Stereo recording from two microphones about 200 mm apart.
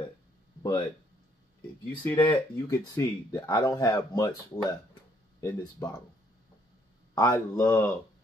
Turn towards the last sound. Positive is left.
turn(degrees=15)  # may be behind; listen again after turning